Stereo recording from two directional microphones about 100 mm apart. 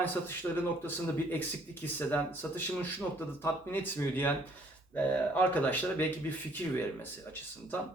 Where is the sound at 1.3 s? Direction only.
20° left (ahead or behind).